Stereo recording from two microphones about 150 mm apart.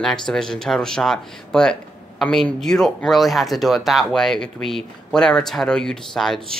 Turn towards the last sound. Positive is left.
turn(degrees=0)  # may be behind; listen again after turning